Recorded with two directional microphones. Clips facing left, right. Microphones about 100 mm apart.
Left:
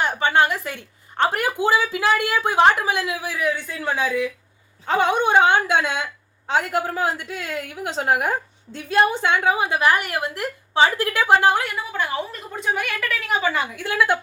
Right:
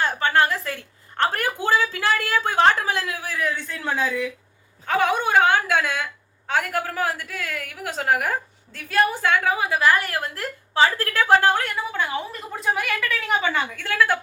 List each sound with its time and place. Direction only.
0.0 s a woman's voice: 20° left (ahead or behind)
4.9 s a woman's voice: 20° left (ahead or behind)
11.7 s speech: 5° left (ahead or behind)
13.8 s a woman's voice: 20° left (ahead or behind)